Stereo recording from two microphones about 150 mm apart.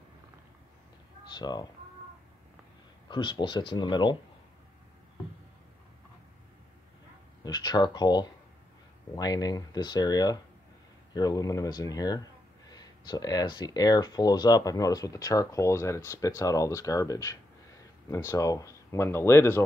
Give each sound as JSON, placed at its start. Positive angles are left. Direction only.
{"t": 1.3, "sound": "speech", "side_deg": 30}
{"t": 3.1, "sound": "speech", "side_deg": 30}
{"t": 7.4, "sound": "speech", "side_deg": 30}